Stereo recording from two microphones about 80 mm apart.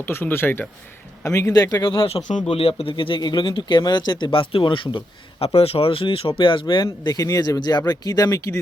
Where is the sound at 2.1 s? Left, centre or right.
Left.